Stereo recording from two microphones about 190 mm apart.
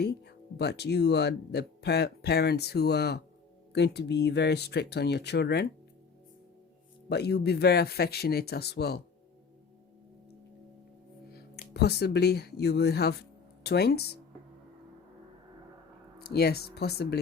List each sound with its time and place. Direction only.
0.0 s speech: 60° left (ahead or behind)
7.1 s speech: 60° left (ahead or behind)
11.3 s speech: 55° left (ahead or behind)
16.1 s speech: 55° left (ahead or behind)